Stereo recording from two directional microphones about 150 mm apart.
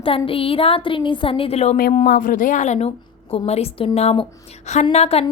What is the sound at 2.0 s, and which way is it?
A woman's voice, 70° left (ahead or behind).